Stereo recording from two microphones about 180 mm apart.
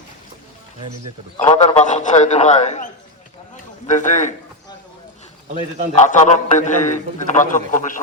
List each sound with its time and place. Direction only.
1.5 s a man's voice: 35° left (ahead or behind)
3.8 s a man's voice: 40° left (ahead or behind)
5.9 s a man's voice: 40° left (ahead or behind)